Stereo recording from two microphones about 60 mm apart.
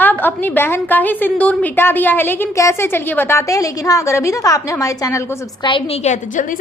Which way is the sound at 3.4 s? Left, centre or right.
Left.